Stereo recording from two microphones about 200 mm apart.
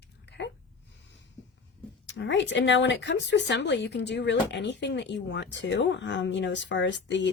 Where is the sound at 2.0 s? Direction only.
65° left (ahead or behind).